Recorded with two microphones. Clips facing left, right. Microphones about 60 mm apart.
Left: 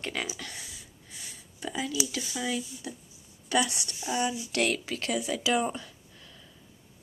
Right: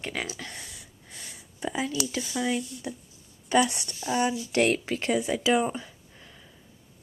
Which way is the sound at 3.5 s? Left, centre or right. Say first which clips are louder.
Right 4 dB; right.